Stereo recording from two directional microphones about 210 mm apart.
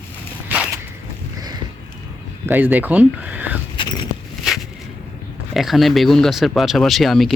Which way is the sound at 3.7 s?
25° left (ahead or behind).